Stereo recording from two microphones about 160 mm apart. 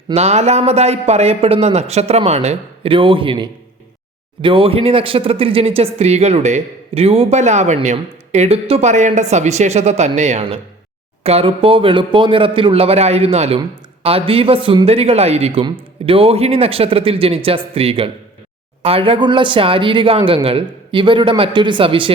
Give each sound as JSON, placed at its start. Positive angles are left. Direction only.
{"t": 0.1, "sound": "speech", "side_deg": -40}